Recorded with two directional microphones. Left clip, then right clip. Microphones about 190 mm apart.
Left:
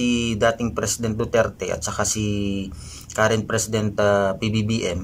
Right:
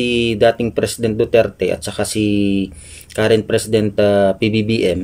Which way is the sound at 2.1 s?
65° right (ahead or behind).